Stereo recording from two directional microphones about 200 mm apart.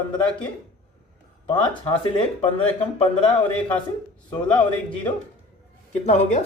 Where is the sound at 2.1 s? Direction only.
25° left (ahead or behind).